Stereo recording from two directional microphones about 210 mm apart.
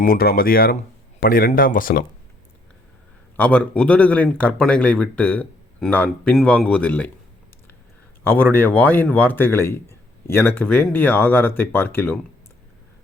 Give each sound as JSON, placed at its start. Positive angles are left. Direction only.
{"t": 0.0, "sound": "speech", "side_deg": 45}
{"t": 3.3, "sound": "speech", "side_deg": 5}
{"t": 8.2, "sound": "speech", "side_deg": 10}